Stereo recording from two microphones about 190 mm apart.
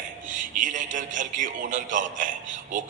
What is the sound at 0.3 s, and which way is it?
A man's voice, 45° right (ahead or behind).